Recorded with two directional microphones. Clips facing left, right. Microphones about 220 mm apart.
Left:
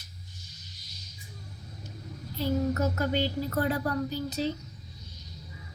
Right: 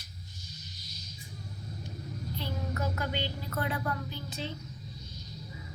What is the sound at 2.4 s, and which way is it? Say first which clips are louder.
Speech: left 10 dB; 45° left (ahead or behind).